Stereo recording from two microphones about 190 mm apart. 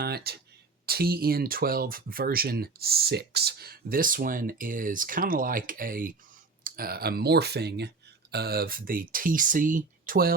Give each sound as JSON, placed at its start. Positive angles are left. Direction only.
{"t": 0.0, "sound": "speech", "side_deg": -55}